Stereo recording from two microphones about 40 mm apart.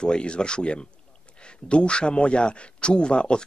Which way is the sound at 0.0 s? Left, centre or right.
Left.